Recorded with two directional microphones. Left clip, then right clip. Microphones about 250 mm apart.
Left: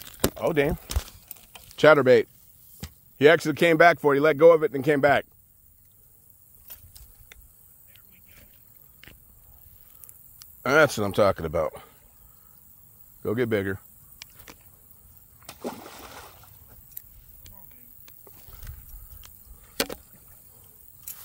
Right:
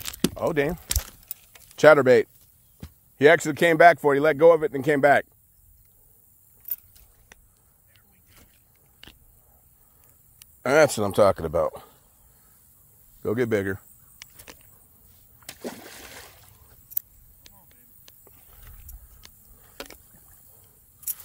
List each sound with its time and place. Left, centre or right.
0.4 s speech: centre
1.8 s speech: centre
10.6 s speech: centre
13.2 s speech: centre
15.4 s splash: right
18.7 s a sound: left